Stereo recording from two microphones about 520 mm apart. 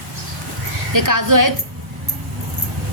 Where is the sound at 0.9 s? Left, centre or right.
Right.